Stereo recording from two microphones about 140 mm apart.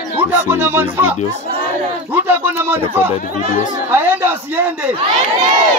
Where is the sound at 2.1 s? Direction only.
15° right (ahead or behind).